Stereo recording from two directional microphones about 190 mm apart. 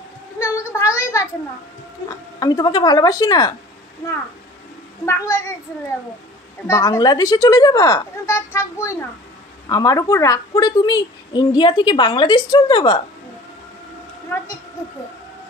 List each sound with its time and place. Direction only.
0.4 s a sound: 15° left (ahead or behind)
2.0 s a woman's voice: 20° left (ahead or behind)
5.0 s a woman's voice: 15° left (ahead or behind)
6.7 s a woman's voice: 20° left (ahead or behind)